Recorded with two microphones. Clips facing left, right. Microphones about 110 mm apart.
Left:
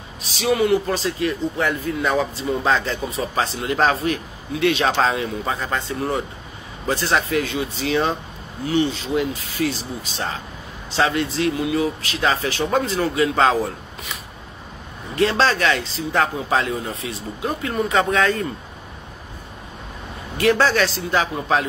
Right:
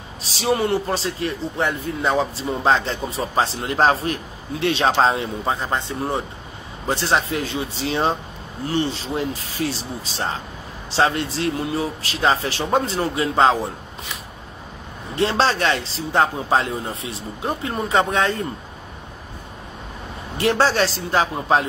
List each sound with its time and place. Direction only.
0.4 s a man's voice: 35° right (ahead or behind)
15.1 s a man's voice: 30° right (ahead or behind)
20.3 s a man's voice: 30° right (ahead or behind)